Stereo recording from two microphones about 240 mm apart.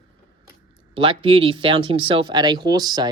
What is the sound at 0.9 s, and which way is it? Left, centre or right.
Speech, right.